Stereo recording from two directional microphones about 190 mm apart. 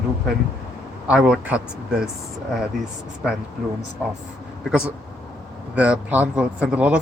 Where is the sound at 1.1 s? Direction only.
5° right (ahead or behind).